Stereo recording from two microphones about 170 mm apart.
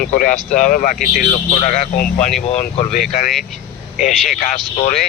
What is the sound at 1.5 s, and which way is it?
Speech, 45° left (ahead or behind).